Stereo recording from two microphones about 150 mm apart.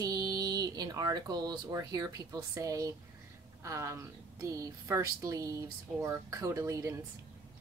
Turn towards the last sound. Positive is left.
turn(degrees=-20)  # may be behind; listen again after turning